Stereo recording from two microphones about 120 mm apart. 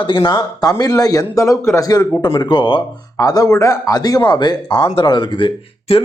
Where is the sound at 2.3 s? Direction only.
40° left (ahead or behind).